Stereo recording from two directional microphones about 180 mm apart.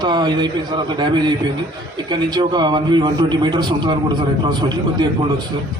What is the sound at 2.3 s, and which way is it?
A man's voice, 25° right (ahead or behind).